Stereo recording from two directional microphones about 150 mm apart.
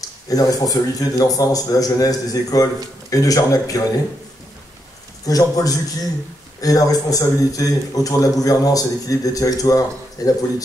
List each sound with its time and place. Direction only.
0.3 s a man's voice: 25° left (ahead or behind)
5.2 s a man's voice: 25° left (ahead or behind)